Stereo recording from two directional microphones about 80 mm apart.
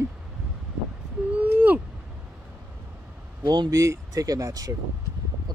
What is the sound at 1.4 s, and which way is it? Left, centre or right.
Owl, centre.